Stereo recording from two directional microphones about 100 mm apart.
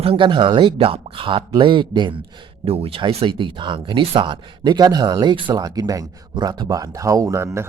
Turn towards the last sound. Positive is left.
turn(degrees=-30)  # may be behind; listen again after turning